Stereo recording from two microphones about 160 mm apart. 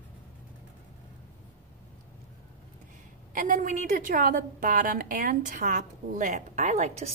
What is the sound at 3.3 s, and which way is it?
A woman's voice, 55° right (ahead or behind).